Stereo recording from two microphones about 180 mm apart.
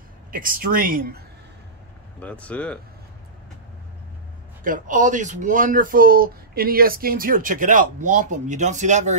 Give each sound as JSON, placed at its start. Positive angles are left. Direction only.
{"t": 0.3, "sound": "speech", "side_deg": -50}
{"t": 2.1, "sound": "speech", "side_deg": 5}
{"t": 4.6, "sound": "speech", "side_deg": -45}